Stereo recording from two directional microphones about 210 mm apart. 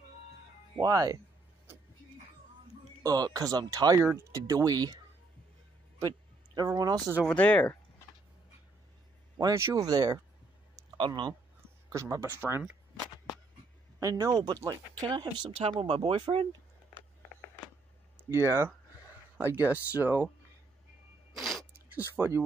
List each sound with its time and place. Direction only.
0.7 s speech: 15° right (ahead or behind)
3.0 s speech: 15° right (ahead or behind)
7.2 s speech: 5° left (ahead or behind)
9.4 s speech: 15° right (ahead or behind)
10.8 s a sound: 20° right (ahead or behind)
11.9 s speech: 15° right (ahead or behind)
13.9 s speech: 15° right (ahead or behind)
18.1 s speech: 10° right (ahead or behind)
21.4 s a sound: centre (ahead or behind)
22.1 s speech: 10° right (ahead or behind)